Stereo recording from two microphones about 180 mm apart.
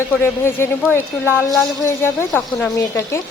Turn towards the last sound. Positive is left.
turn(degrees=15)  # may be behind; listen again after turning